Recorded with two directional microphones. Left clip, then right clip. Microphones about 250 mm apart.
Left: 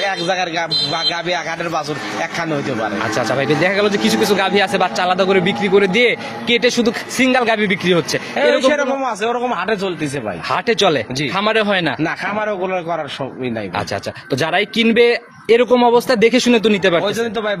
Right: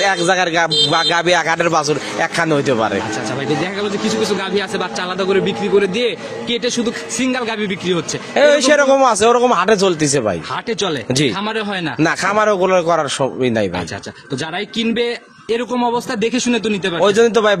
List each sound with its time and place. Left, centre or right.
0.0 s speech: right
3.3 s a man's voice: left
8.4 s a man's voice: right
10.5 s a man's voice: left
12.0 s speech: right
14.4 s a man's voice: left
17.0 s speech: right